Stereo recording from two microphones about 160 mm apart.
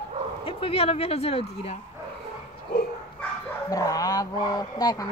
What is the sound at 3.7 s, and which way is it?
Speech, 20° left (ahead or behind).